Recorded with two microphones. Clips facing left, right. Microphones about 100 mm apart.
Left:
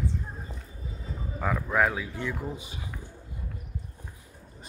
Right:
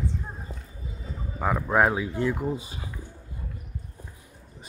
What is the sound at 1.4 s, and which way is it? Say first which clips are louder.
Speech: right 3 dB; 20° right (ahead or behind).